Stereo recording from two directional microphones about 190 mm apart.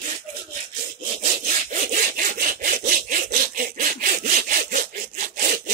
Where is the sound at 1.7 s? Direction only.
40° right (ahead or behind).